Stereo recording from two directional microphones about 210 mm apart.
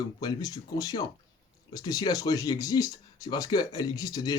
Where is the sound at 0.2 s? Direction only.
20° left (ahead or behind).